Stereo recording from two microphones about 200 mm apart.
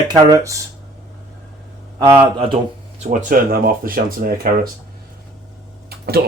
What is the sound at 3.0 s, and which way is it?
Speech, 40° right (ahead or behind).